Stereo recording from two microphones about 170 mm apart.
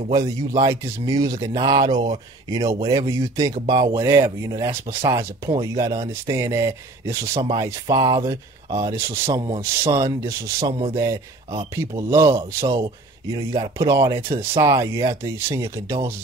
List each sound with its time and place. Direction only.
0.1 s speech: 20° right (ahead or behind)